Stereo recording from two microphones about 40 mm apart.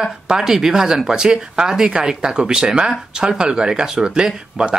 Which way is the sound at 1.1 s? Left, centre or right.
Centre.